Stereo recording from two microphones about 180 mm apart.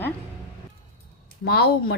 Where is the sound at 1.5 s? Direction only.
60° left (ahead or behind).